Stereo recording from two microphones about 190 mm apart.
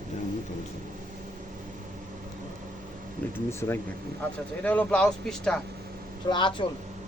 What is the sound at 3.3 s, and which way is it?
Speech, 15° left (ahead or behind).